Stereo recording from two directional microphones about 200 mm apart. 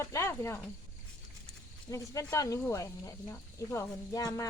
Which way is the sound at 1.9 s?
15° left (ahead or behind).